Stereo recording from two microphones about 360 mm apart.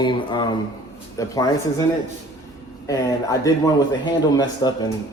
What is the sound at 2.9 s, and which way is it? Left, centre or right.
A man's voice, centre.